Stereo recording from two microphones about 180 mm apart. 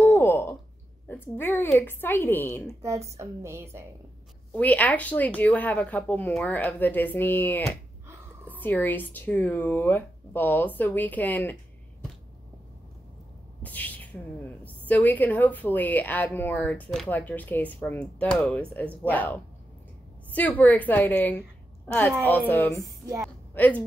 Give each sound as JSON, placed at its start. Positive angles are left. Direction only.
{"t": 0.0, "sound": "a sound", "side_deg": 10}
{"t": 1.0, "sound": "a woman's voice", "side_deg": 10}
{"t": 2.8, "sound": "a woman's voice", "side_deg": -15}
{"t": 4.6, "sound": "a woman's voice", "side_deg": 10}
{"t": 13.6, "sound": "a woman's voice", "side_deg": 10}